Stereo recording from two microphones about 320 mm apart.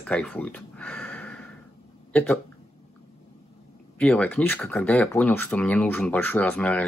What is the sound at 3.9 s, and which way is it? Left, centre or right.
Speech, centre.